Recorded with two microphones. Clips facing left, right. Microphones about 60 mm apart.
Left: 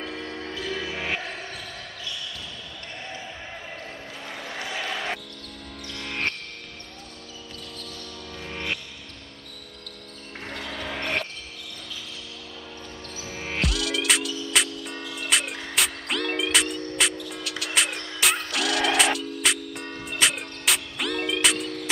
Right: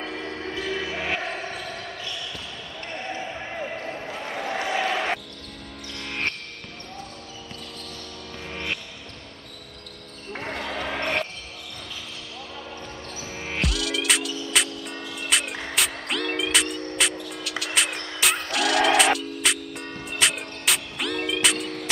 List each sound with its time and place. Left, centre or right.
0.0 s music: centre
1.2 s basketball bounce: right
3.0 s basketball bounce: right
5.9 s music: centre
8.5 s basketball bounce: centre
10.4 s basketball bounce: right
13.2 s music: centre